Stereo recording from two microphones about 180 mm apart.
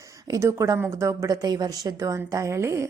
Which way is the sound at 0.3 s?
15° right (ahead or behind).